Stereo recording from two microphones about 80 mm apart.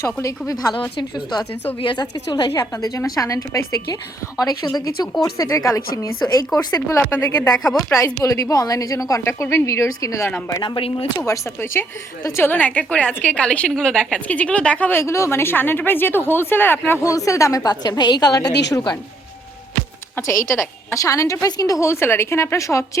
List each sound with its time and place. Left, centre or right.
0.0 s a woman's voice: left
1.8 s a woman's voice: left
2.5 s a woman's voice: left
7.0 s speech: left
7.5 s a woman's voice: centre
7.9 s a woman's voice: left
11.3 s a woman's voice: left
15.0 s speech: left
17.0 s a woman's voice: left
20.1 s a woman's voice: left